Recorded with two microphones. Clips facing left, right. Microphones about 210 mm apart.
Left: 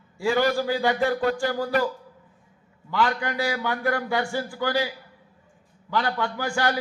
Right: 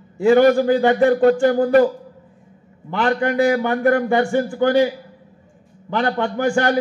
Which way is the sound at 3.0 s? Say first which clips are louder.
Right 8 dB; 45° right (ahead or behind).